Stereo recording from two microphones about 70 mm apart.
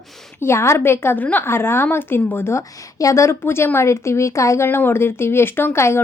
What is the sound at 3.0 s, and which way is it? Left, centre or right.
A woman's voice, left.